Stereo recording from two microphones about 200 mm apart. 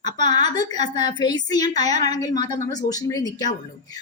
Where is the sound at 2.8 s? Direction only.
15° left (ahead or behind).